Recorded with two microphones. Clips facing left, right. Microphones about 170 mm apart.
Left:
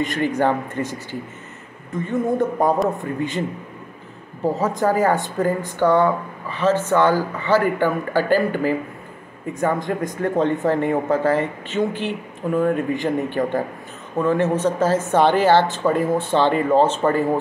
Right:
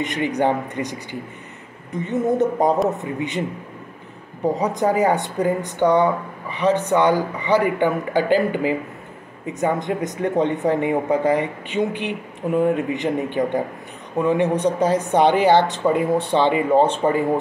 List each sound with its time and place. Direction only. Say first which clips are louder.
0.0 s speech: left 1 dB; 20° right (ahead or behind)
4.6 s speech: even; 20° right (ahead or behind)